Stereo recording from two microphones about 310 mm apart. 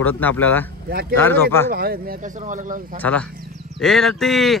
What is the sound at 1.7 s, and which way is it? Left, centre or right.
Speech, right.